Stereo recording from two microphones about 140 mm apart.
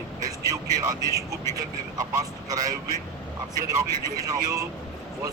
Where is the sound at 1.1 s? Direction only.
20° left (ahead or behind).